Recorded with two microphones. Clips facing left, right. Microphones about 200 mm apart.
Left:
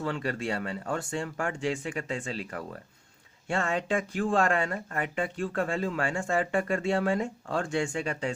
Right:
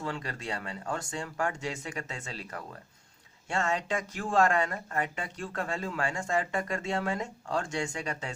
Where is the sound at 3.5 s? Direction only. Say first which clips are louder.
Left 2 dB; 35° left (ahead or behind).